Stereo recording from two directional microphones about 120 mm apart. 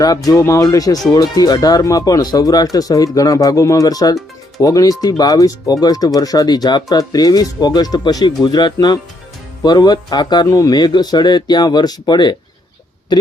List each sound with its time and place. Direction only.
0.3 s speech: 25° left (ahead or behind)